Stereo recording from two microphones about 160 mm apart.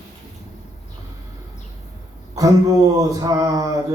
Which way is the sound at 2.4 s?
20° right (ahead or behind).